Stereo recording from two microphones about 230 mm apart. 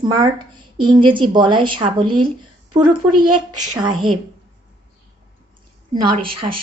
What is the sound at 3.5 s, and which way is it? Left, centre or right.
Speech, centre.